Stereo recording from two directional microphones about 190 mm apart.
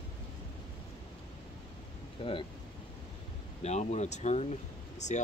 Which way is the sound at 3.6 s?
35° left (ahead or behind).